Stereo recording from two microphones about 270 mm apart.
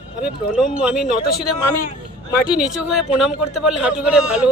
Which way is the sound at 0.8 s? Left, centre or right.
Centre.